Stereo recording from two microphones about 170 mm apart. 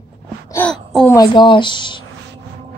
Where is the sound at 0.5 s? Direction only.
10° left (ahead or behind).